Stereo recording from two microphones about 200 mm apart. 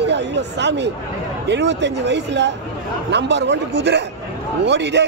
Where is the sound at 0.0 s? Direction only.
60° right (ahead or behind).